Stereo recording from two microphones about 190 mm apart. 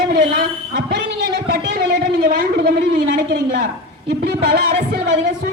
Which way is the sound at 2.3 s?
50° right (ahead or behind).